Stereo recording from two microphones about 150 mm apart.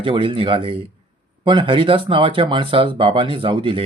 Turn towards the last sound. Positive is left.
turn(degrees=-35)  # may be behind; listen again after turning